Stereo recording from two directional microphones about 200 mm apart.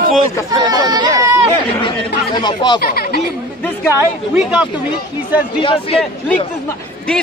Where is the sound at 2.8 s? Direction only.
50° left (ahead or behind).